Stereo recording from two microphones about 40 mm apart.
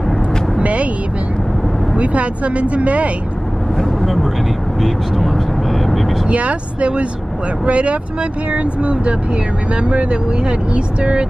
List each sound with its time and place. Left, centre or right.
0.6 s vehicle: right
2.0 s speech: right
3.7 s speech: centre
6.2 s speech: right